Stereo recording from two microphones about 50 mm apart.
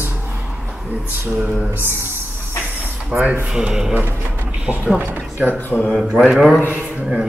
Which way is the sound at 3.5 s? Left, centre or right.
Centre.